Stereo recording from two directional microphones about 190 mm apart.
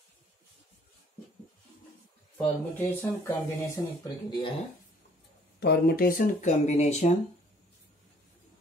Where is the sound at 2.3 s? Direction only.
10° left (ahead or behind).